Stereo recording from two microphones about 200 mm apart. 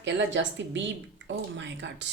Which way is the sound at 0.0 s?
65° right (ahead or behind).